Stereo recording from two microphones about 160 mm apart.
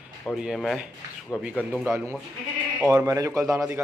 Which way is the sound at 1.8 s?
15° right (ahead or behind).